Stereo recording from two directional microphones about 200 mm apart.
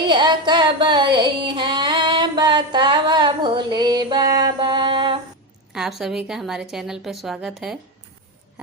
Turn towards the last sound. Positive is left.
turn(degrees=0)  # may be behind; listen again after turning